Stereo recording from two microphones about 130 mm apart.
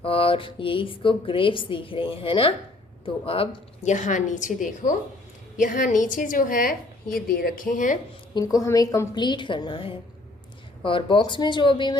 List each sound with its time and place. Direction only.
0.0 s speech: 45° left (ahead or behind)
3.8 s a woman's voice: 70° left (ahead or behind); by 4.9 s 90° left
5.5 s a woman's voice: 80° left
8.4 s a woman's voice: 25° left (ahead or behind)